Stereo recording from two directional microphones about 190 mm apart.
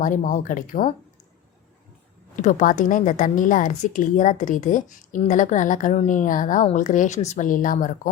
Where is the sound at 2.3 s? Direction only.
40° left (ahead or behind).